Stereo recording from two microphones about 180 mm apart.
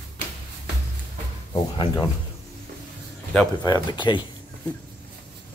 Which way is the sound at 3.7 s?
25° left (ahead or behind).